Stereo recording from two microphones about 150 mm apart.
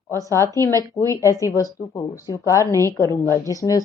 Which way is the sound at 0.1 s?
20° left (ahead or behind).